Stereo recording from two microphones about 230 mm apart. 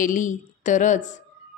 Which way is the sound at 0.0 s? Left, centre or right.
Left.